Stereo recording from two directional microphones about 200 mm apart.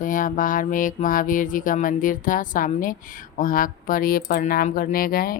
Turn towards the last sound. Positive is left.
turn(degrees=45)  # may be behind; listen again after turning